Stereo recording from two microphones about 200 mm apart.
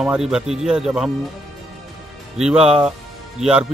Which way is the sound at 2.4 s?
5° right (ahead or behind).